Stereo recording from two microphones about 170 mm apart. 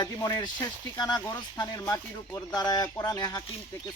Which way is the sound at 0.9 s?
25° left (ahead or behind).